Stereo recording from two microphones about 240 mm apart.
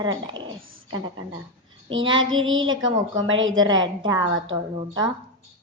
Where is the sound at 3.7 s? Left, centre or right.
Centre.